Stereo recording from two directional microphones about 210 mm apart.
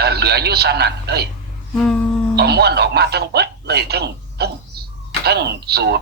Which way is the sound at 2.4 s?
50° right (ahead or behind).